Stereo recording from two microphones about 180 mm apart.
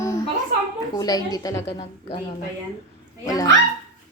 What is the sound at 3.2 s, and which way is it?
Speech, 20° left (ahead or behind).